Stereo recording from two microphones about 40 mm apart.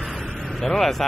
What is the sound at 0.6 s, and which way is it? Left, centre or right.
Speech, centre.